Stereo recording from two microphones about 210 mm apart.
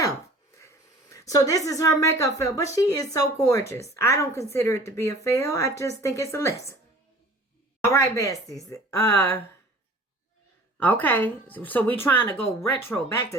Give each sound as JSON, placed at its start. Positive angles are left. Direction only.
{"t": 1.1, "sound": "a woman's voice", "side_deg": 15}
{"t": 7.9, "sound": "a woman's voice", "side_deg": 15}
{"t": 10.8, "sound": "a woman's voice", "side_deg": 10}